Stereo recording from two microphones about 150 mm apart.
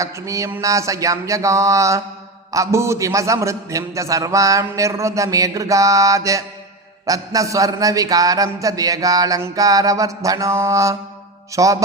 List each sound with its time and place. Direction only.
0.0 s a man's voice: 20° right (ahead or behind)